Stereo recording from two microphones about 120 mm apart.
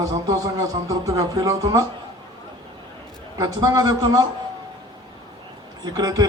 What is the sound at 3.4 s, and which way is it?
Speech, 35° right (ahead or behind).